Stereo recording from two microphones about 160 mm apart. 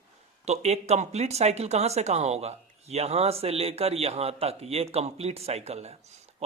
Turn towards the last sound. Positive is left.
turn(degrees=-40)  # may be behind; listen again after turning